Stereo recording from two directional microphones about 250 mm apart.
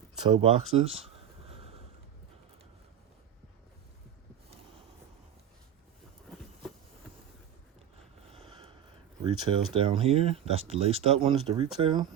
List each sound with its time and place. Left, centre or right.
0.2 s speech: centre
0.7 s a sound: right
8.3 s vehicle: right
9.2 s speech: right